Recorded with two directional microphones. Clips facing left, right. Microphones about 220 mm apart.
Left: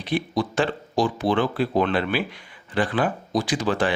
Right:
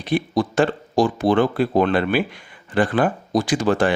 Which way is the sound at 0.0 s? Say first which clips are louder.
Right 4 dB; 50° right (ahead or behind).